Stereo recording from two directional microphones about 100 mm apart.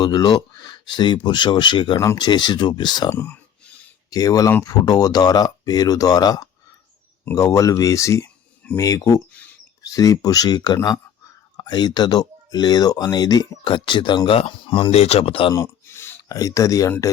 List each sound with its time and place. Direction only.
0.0 s speech: 45° left (ahead or behind)
3.1 s a sound: 20° left (ahead or behind)
4.1 s speech: 40° left (ahead or behind)
14.3 s speech: 60° left (ahead or behind)
15.5 s a sound: 25° left (ahead or behind)
16.3 s speech: 35° left (ahead or behind)